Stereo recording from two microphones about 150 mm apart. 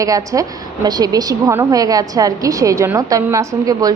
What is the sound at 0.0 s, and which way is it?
A woman's voice, 20° right (ahead or behind).